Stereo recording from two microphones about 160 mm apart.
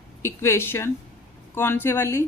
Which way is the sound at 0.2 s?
15° left (ahead or behind).